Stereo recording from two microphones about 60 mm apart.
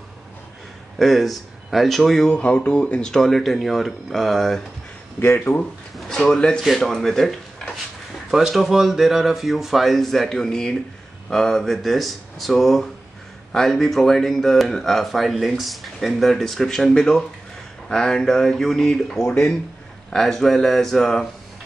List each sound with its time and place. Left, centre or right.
0.9 s speech: centre
2.2 s speech: left; by 4.6 s centre
5.2 s speech: left
5.9 s speech: centre
6.6 s speech: centre